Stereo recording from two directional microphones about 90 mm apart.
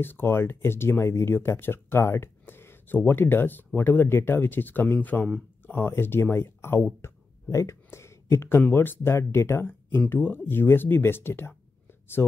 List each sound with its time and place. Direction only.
0.0 s speech: 25° left (ahead or behind)